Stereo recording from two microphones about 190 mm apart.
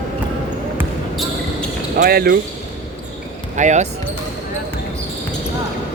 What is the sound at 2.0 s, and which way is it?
Speech, 55° right (ahead or behind).